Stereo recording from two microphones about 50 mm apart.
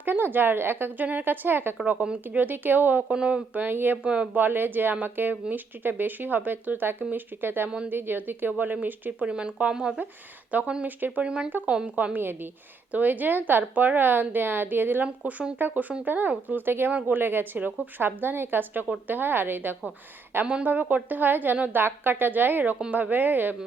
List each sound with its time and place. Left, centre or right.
0.0 s a woman's voice: right
3.1 s speech: right
3.5 s a woman's voice: right
4.0 s speech: right
4.4 s a woman's voice: right
9.2 s speech: centre
10.5 s a woman's voice: right
12.1 s a woman's voice: right
15.0 s a woman's voice: right
17.6 s speech: right
17.9 s a woman's voice: right
20.7 s a woman's voice: right